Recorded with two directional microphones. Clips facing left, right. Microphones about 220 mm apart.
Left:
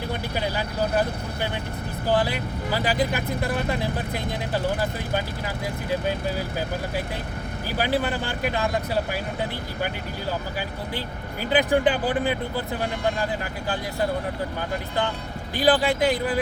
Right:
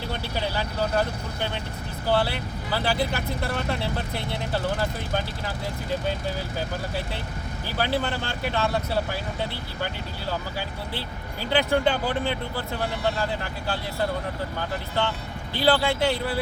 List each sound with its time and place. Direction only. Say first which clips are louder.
0.1 s speech: left 1 dB; 10° left (ahead or behind)
7.7 s speech: left 2 dB; 15° left (ahead or behind)
11.5 s speech: left 2 dB; 15° left (ahead or behind)
15.5 s speech: left 2 dB; 15° left (ahead or behind)